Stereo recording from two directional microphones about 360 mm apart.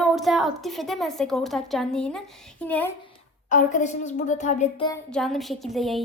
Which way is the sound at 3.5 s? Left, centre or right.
Left.